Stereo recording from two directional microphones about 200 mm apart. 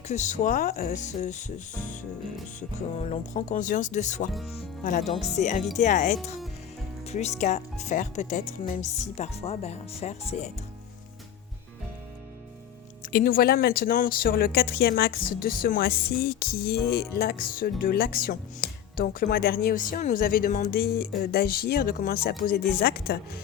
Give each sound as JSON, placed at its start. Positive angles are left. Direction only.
{"t": 0.1, "sound": "speech", "side_deg": 35}
{"t": 13.1, "sound": "speech", "side_deg": 45}